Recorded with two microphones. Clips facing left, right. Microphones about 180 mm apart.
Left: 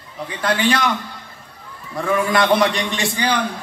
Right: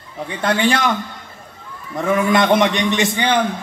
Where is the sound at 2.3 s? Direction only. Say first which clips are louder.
Right 1 dB; 25° right (ahead or behind).